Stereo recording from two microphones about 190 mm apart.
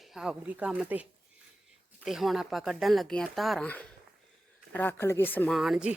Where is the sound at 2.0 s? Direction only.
Centre (ahead or behind).